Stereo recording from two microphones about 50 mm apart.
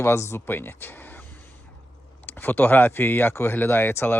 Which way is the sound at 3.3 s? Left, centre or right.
Left.